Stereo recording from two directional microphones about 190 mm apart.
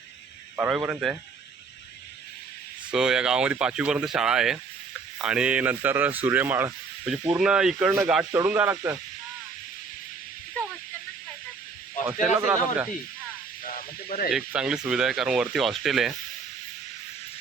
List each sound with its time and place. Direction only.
0.5 s speech: 10° right (ahead or behind)
2.9 s speech: 5° right (ahead or behind)
12.4 s speech: 10° right (ahead or behind)
13.7 s snake: 45° left (ahead or behind)
14.3 s speech: 5° right (ahead or behind)